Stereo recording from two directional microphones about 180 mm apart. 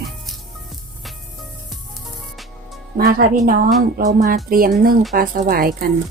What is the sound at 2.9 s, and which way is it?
Speech, 55° right (ahead or behind).